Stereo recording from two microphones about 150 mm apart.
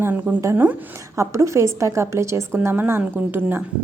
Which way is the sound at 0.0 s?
15° right (ahead or behind).